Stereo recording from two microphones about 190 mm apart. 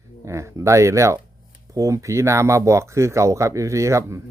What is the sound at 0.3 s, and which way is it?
Speech, 15° right (ahead or behind).